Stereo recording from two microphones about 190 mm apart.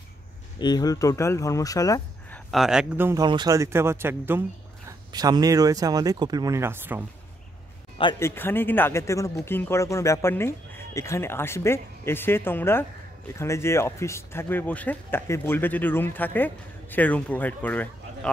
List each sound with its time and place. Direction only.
0.6 s speech: 20° left (ahead or behind)
2.5 s a man's voice: centre (ahead or behind)
8.2 s speech: 10° left (ahead or behind)